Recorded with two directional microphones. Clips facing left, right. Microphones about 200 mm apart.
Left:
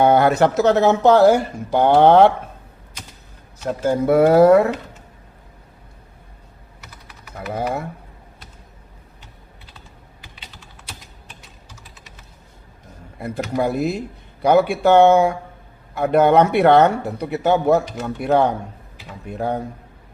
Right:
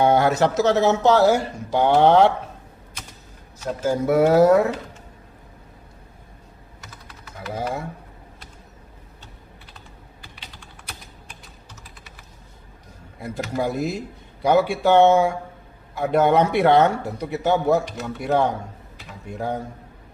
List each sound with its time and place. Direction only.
0.0 s speech: 55° left (ahead or behind)
3.6 s speech: 60° left (ahead or behind)
7.3 s speech: 60° left (ahead or behind)
13.1 s speech: 60° left (ahead or behind)